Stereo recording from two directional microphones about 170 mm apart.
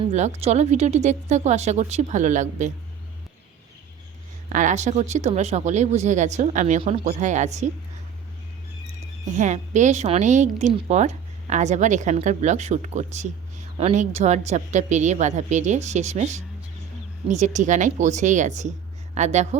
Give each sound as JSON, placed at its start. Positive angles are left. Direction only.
{"t": 0.1, "sound": "a woman's voice", "side_deg": -40}
{"t": 4.4, "sound": "a woman's voice", "side_deg": -45}
{"t": 9.3, "sound": "a woman's voice", "side_deg": -45}